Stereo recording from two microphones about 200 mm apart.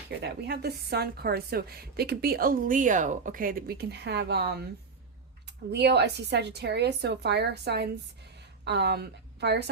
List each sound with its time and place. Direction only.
0.1 s a woman's voice: 55° right (ahead or behind)